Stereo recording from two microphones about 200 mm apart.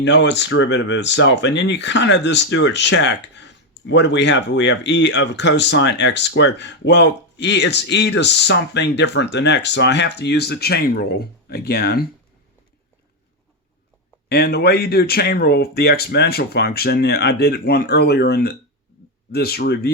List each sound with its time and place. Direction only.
0.0 s speech: 60° left (ahead or behind)
14.3 s speech: 50° left (ahead or behind)